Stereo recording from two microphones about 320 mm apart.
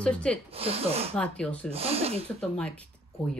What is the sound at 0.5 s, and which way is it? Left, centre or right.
Speech, centre.